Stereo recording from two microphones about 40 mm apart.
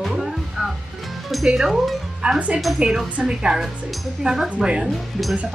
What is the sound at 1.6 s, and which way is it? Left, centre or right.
Speech, centre.